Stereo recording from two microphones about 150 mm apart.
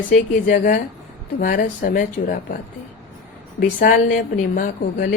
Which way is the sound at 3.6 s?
65° left (ahead or behind).